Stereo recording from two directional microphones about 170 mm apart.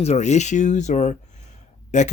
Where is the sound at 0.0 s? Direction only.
40° left (ahead or behind).